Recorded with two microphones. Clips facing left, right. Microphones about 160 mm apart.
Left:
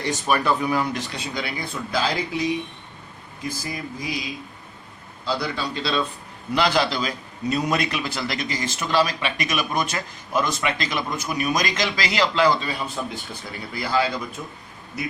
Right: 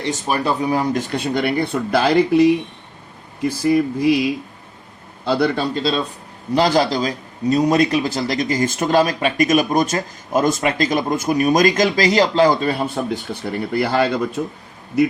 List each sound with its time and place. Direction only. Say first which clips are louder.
0.0 s a man's voice: right 2 dB; 30° right (ahead or behind); by 14.4 s 60° right (ahead or behind)